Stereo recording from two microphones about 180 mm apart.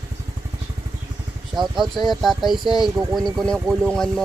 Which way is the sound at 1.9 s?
Centre (ahead or behind).